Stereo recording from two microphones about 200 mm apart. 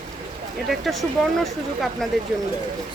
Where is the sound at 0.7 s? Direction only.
Centre (ahead or behind).